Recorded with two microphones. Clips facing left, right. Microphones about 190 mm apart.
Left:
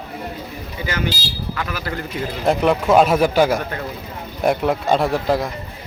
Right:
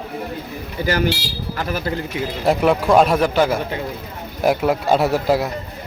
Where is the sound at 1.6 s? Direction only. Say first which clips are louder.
Right 5 dB; 35° right (ahead or behind).